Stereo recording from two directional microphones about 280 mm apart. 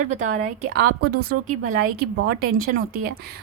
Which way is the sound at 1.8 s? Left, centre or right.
Right.